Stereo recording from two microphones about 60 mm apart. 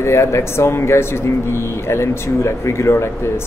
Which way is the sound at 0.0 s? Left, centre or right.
Left.